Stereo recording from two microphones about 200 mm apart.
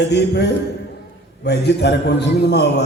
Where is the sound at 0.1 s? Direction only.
55° left (ahead or behind).